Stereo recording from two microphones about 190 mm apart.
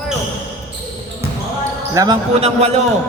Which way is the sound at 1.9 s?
20° right (ahead or behind).